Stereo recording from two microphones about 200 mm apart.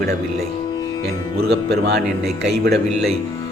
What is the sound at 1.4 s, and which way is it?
Speech, 55° right (ahead or behind).